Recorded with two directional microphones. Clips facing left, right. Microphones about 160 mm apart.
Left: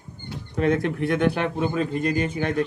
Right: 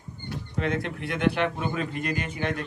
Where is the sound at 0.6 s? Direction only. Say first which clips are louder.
Left 7 dB; 45° left (ahead or behind).